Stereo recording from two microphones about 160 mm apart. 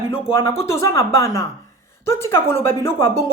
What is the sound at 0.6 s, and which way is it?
A woman's voice, 15° left (ahead or behind).